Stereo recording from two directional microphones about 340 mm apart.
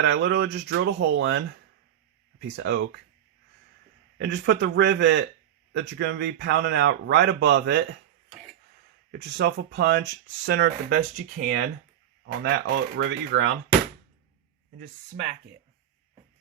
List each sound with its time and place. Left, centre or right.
0.0 s a man's voice: right
4.2 s a man's voice: right
9.1 s speech: right
12.2 s speech: right
14.8 s speech: right